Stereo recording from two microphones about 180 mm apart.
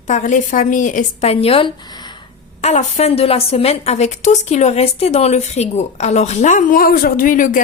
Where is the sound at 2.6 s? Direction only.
35° left (ahead or behind).